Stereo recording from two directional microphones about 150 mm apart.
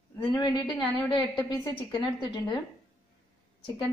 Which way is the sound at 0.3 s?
30° left (ahead or behind).